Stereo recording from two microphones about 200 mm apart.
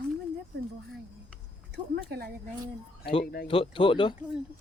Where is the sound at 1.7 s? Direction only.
55° right (ahead or behind).